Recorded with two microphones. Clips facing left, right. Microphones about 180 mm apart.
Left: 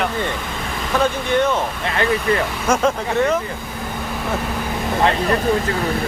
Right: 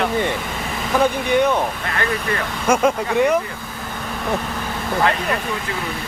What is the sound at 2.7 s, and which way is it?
Speech, 10° right (ahead or behind).